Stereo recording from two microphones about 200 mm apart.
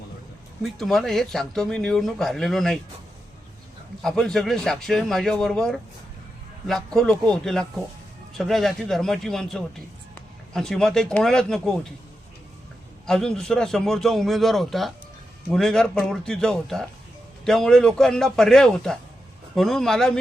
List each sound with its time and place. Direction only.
0.6 s speech: centre (ahead or behind)
4.0 s speech: 5° left (ahead or behind)
13.1 s speech: 5° left (ahead or behind)